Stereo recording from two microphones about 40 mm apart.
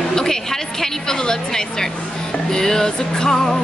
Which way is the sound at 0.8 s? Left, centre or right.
Centre.